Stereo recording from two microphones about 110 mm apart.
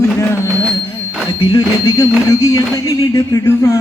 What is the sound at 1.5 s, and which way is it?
Speech, 35° left (ahead or behind).